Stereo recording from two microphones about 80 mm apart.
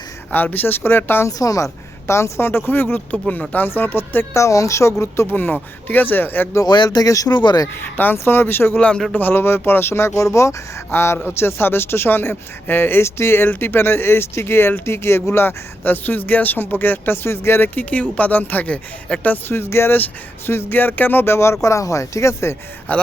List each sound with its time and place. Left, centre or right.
0.3 s speech: left
1.3 s speech: left
5.3 s speech: left
6.7 s speech: left
7.1 s speech: left
7.8 s speech: left
8.7 s speech: centre
9.1 s speech: left
22.9 s speech: centre